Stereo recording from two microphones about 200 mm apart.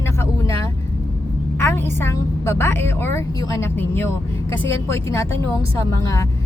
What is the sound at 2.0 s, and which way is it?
Speech, 15° left (ahead or behind).